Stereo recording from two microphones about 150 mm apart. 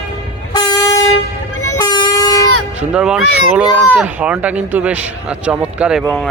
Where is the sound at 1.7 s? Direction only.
25° left (ahead or behind).